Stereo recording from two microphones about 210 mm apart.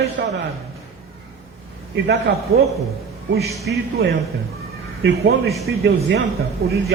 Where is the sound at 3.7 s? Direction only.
60° right (ahead or behind).